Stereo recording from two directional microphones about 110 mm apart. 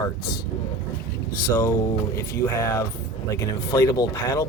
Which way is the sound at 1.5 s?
20° left (ahead or behind).